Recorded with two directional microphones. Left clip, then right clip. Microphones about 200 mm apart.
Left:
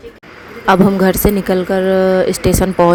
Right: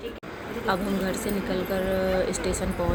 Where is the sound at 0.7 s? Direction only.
55° left (ahead or behind).